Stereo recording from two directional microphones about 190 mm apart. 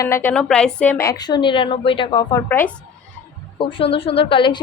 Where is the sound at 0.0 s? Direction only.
15° left (ahead or behind).